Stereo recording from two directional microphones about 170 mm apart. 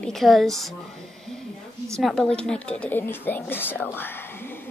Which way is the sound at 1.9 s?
5° left (ahead or behind).